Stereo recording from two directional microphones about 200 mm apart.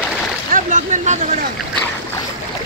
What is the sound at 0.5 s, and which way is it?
Speech, 40° right (ahead or behind).